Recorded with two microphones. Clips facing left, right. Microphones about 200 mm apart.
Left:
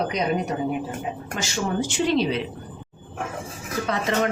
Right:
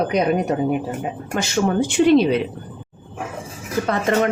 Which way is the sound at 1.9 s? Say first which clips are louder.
Right 9 dB; 55° right (ahead or behind).